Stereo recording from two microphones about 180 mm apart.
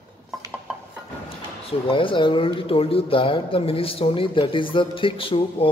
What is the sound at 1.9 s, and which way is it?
Speech, 30° left (ahead or behind).